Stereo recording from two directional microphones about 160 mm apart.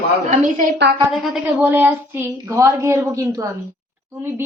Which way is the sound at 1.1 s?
Centre (ahead or behind).